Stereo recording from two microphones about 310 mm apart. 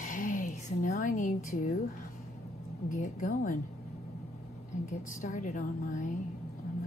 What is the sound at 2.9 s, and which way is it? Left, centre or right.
Speech, left.